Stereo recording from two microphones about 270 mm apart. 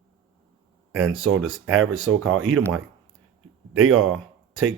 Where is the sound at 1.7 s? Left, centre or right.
Right.